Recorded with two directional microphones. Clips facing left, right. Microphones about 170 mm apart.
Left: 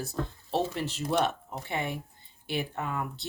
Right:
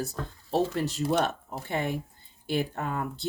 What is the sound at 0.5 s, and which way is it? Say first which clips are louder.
Speech: right 3 dB; 40° right (ahead or behind).